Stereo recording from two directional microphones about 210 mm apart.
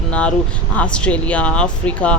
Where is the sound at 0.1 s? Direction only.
5° left (ahead or behind).